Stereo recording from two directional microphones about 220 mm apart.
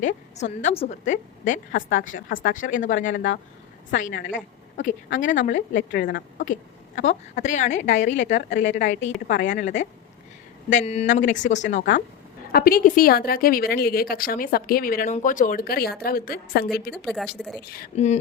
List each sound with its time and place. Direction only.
0.0 s a woman's voice: 35° left (ahead or behind)
2.1 s speech: 60° left (ahead or behind)
2.6 s a woman's voice: 35° left (ahead or behind)
3.1 s speech: 60° left (ahead or behind)
3.9 s a woman's voice: 35° left (ahead or behind)
5.9 s a woman's voice: 45° left (ahead or behind)
11.8 s a woman's voice: 45° left (ahead or behind)
16.9 s speech: centre (ahead or behind)
17.9 s a woman's voice: 30° left (ahead or behind)